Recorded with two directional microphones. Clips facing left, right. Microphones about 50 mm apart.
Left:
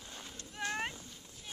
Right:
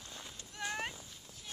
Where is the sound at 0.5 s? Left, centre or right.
Centre.